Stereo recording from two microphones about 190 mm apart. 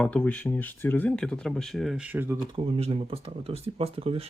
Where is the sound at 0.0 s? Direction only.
5° left (ahead or behind); by 2.4 s 10° right (ahead or behind).